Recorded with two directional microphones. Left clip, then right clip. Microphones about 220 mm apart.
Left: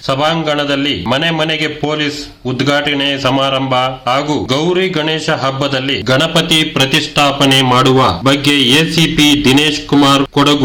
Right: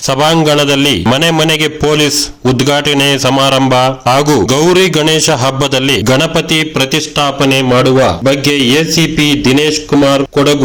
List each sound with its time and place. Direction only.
0.1 s a man's voice: 35° right (ahead or behind); by 10.6 s 15° right (ahead or behind)